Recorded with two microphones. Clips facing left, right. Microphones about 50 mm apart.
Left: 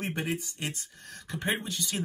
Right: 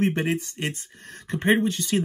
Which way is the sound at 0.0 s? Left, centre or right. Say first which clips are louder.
Right 9 dB; right.